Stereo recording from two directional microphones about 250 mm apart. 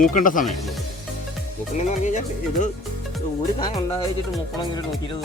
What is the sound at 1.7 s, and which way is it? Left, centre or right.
Speech, left.